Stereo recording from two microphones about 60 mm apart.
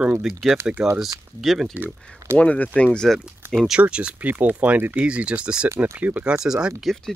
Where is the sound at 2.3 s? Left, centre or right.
Left.